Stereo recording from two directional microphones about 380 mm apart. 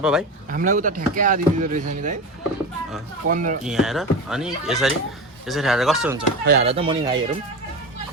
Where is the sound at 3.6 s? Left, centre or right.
Centre.